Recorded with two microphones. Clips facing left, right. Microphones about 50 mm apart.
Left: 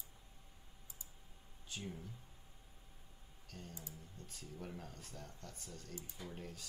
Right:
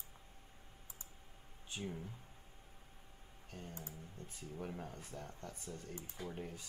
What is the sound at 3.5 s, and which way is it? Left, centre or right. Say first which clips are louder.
Speech: right 3 dB; right.